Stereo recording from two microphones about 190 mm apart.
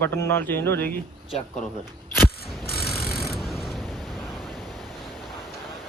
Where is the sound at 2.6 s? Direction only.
55° left (ahead or behind).